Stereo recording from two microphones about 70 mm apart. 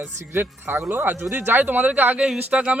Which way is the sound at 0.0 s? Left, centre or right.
Right.